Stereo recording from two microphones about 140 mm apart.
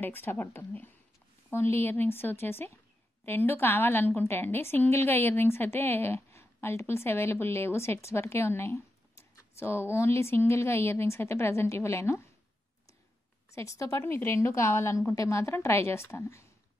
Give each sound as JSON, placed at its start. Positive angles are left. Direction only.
{"t": 0.0, "sound": "a woman's voice", "side_deg": 15}
{"t": 13.5, "sound": "a woman's voice", "side_deg": 20}